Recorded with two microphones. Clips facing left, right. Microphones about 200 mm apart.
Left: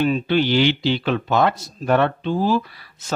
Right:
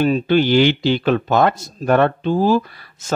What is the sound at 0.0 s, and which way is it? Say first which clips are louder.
Speech: right 3 dB; 45° right (ahead or behind).